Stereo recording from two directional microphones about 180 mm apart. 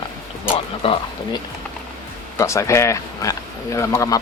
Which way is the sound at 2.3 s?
15° left (ahead or behind).